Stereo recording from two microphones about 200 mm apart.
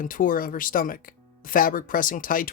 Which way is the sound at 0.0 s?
45° left (ahead or behind).